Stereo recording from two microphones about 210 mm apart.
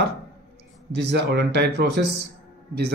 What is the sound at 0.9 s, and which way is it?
A man's voice, 55° right (ahead or behind).